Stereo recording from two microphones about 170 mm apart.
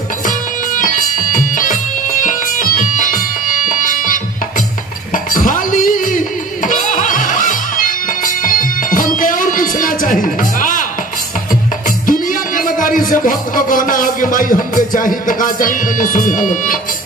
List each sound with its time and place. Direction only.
0.3 s music: 50° left (ahead or behind)
12.1 s a man's voice: 55° left (ahead or behind)